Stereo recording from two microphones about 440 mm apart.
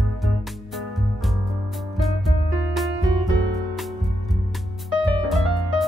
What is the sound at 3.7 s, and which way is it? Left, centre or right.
Music, centre.